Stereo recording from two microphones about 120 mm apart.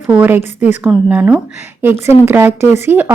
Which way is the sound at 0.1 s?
15° right (ahead or behind).